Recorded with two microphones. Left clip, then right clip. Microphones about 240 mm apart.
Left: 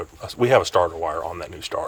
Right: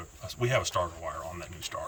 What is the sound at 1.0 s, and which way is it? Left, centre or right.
Speech, centre.